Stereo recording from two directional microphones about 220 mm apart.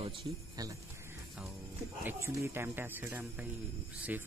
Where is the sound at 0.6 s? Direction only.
15° right (ahead or behind).